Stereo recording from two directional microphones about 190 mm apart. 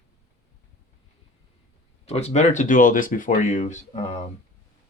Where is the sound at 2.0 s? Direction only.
35° left (ahead or behind).